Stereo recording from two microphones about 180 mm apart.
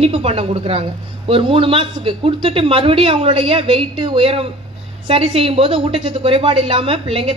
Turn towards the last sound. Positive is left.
turn(degrees=-30)  # may be behind; listen again after turning